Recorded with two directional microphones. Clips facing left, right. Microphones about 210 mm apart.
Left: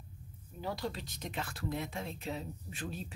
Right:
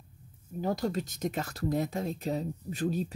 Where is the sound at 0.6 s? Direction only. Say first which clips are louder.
Right 8 dB; 45° right (ahead or behind).